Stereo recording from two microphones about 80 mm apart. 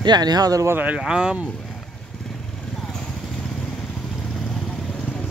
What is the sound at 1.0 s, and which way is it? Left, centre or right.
Speech, centre.